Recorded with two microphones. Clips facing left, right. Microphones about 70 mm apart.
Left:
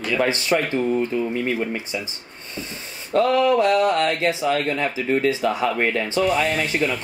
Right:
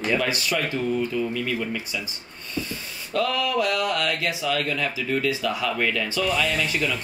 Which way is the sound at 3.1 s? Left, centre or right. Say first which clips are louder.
Left 7 dB; left.